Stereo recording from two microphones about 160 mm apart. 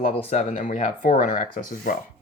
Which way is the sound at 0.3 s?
50° left (ahead or behind).